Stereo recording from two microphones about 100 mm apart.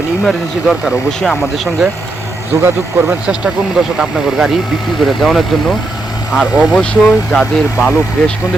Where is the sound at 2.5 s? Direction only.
20° right (ahead or behind).